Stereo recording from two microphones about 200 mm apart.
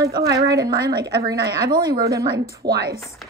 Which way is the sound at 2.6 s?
50° right (ahead or behind).